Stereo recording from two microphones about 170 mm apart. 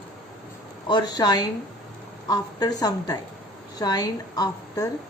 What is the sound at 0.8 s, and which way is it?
Speech, 25° left (ahead or behind).